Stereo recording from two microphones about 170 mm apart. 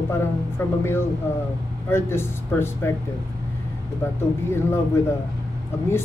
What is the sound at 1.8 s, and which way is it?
Speech, 15° left (ahead or behind).